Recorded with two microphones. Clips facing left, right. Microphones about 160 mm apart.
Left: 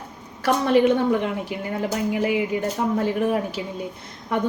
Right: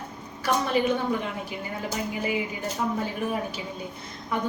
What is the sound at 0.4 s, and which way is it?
Speech, 70° left (ahead or behind).